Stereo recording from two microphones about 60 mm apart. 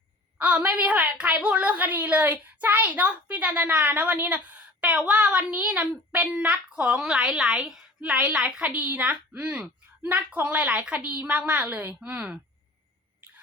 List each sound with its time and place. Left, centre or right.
0.3 s a woman's voice: right
7.0 s a woman's voice: centre